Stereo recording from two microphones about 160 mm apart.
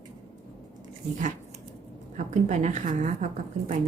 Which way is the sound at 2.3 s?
45° right (ahead or behind).